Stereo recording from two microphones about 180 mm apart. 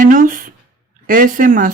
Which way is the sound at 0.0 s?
45° right (ahead or behind).